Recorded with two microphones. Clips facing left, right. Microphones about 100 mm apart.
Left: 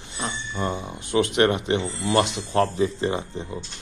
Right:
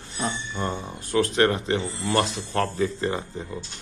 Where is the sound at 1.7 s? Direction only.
20° left (ahead or behind).